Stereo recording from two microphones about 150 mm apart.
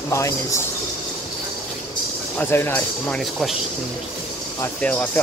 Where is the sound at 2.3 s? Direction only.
15° left (ahead or behind).